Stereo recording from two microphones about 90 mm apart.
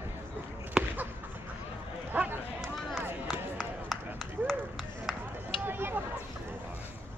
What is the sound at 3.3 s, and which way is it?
Run, centre (ahead or behind).